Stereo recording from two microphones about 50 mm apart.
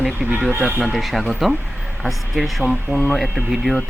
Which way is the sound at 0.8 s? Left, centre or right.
Centre.